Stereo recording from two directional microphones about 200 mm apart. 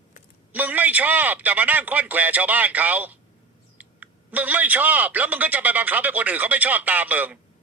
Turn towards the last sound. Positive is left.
turn(degrees=-10)  # may be behind; listen again after turning